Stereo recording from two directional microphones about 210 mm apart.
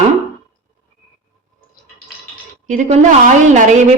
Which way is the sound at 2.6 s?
35° right (ahead or behind).